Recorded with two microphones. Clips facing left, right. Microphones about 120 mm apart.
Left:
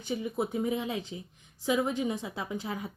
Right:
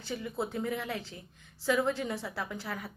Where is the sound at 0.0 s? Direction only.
15° left (ahead or behind).